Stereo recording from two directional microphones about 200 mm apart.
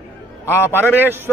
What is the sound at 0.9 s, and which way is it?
Speech, 10° right (ahead or behind).